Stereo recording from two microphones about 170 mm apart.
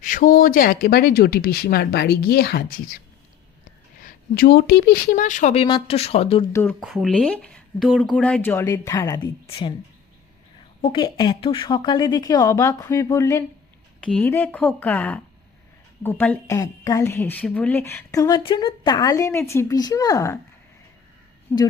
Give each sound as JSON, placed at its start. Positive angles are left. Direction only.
{"t": 0.0, "sound": "speech", "side_deg": 50}
{"t": 4.0, "sound": "a woman's voice", "side_deg": 60}
{"t": 6.5, "sound": "speech", "side_deg": 10}
{"t": 6.8, "sound": "speech", "side_deg": 0}
{"t": 8.2, "sound": "a woman's voice", "side_deg": 10}
{"t": 10.8, "sound": "a woman's voice", "side_deg": 30}
{"t": 14.0, "sound": "a woman's voice", "side_deg": 5}
{"t": 21.5, "sound": "speech", "side_deg": 10}